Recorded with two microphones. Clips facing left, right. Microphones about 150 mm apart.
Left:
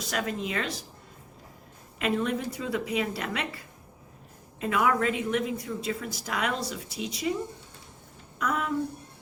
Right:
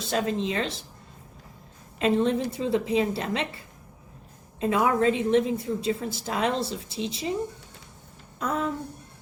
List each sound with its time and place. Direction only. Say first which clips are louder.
0.0 s a woman's voice: right 5 dB; 25° right (ahead or behind)
2.0 s a woman's voice: right 5 dB; 30° right (ahead or behind)
4.6 s a woman's voice: right 3 dB; 25° right (ahead or behind)
8.4 s a woman's voice: right 2 dB; 30° right (ahead or behind)